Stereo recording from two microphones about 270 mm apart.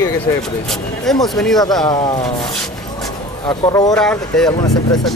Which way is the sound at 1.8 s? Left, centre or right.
Centre.